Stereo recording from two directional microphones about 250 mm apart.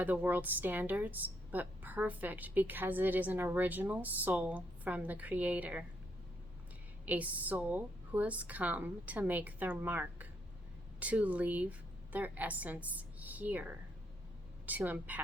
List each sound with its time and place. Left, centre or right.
0.0 s a woman's voice: centre
7.0 s a woman's voice: centre